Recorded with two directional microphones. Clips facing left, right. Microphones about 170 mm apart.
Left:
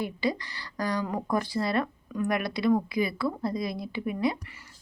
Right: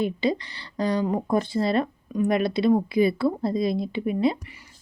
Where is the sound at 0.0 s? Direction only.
25° right (ahead or behind).